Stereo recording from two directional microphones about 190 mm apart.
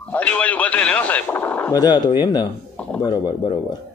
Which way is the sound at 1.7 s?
20° left (ahead or behind).